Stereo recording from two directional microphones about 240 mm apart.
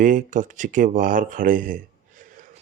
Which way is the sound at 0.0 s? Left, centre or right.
Right.